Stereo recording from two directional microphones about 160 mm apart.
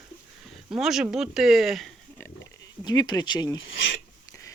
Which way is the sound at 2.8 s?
25° left (ahead or behind).